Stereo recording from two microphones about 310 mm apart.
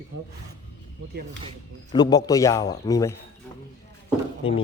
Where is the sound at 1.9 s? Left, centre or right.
Centre.